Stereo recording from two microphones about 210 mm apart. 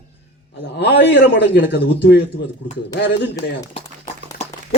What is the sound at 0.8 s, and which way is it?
A man's voice, 50° left (ahead or behind).